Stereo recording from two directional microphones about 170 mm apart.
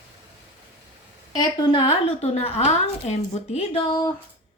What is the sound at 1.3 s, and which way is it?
A woman's voice, 25° left (ahead or behind).